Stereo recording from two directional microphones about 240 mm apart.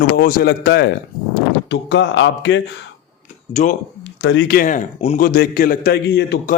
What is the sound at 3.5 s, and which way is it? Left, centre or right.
Speech, left.